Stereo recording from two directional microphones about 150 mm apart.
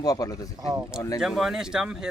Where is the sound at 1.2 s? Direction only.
5° right (ahead or behind).